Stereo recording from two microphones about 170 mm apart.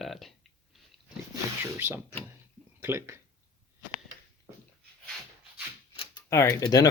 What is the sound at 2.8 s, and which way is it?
Speech, 15° right (ahead or behind).